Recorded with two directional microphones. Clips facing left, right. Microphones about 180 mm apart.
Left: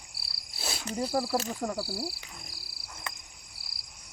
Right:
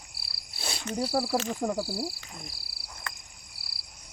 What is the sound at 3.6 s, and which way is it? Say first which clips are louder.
Cricket: right 2 dB; 5° right (ahead or behind).